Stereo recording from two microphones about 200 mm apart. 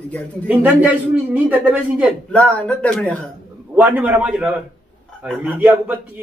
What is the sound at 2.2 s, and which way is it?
Speech, 5° left (ahead or behind).